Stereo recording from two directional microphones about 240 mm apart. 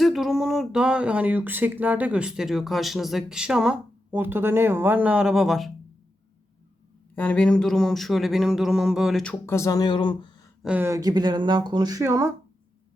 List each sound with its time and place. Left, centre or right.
0.0 s speech: centre
7.2 s speech: centre
10.6 s speech: centre